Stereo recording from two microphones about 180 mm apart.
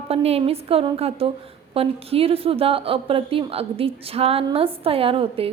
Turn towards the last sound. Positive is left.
turn(degrees=-30)  # may be behind; listen again after turning